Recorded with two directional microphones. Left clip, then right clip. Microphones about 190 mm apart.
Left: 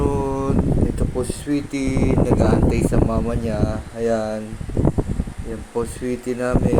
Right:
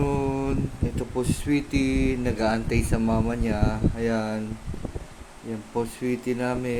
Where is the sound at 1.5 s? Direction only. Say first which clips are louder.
Left 1 dB; 15° right (ahead or behind).